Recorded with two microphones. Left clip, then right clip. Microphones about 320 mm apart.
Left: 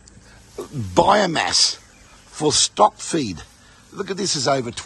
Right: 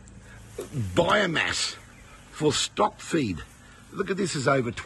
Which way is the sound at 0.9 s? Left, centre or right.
Centre.